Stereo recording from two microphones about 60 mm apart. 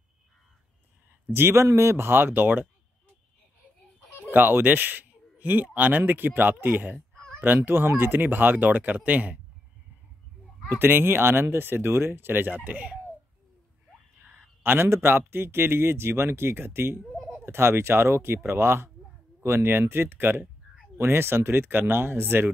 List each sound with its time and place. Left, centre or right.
1.3 s speech: right
4.3 s speech: right
10.7 s speech: right
12.5 s speech: right
14.1 s a man's voice: right
17.0 s a sound: centre
17.5 s a man's voice: right